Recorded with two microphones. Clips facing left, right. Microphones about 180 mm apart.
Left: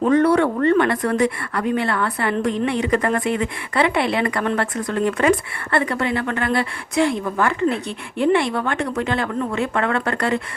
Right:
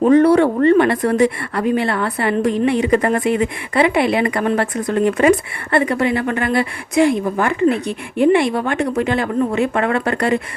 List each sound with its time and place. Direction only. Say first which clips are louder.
0.0 s speech: right 4 dB; 25° right (ahead or behind)